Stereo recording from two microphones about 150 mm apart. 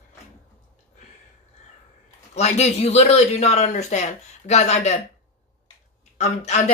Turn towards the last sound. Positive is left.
turn(degrees=50)  # may be behind; listen again after turning